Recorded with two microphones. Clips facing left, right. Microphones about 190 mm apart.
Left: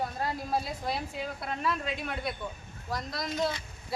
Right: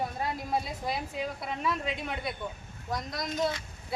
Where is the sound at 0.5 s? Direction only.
Centre (ahead or behind).